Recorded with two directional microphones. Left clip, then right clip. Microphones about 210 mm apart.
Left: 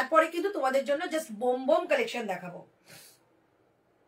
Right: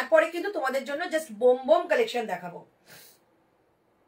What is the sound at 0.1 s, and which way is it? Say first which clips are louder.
Speech: right 4 dB; 15° left (ahead or behind).